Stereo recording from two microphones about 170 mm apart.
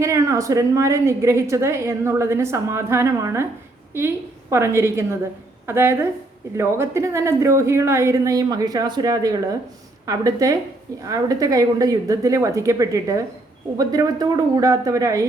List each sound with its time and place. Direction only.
0.0 s a woman's voice: 20° right (ahead or behind)